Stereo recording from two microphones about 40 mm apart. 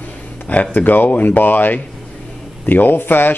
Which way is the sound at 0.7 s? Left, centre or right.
Left.